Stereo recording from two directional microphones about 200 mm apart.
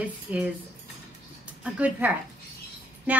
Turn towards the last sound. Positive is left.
turn(degrees=-10)  # may be behind; listen again after turning